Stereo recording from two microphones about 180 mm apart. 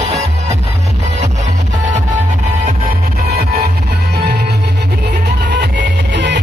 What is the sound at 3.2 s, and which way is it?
Music, 60° right (ahead or behind).